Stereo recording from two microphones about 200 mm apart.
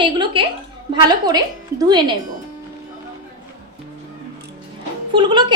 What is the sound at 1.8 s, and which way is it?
Speech, 20° right (ahead or behind).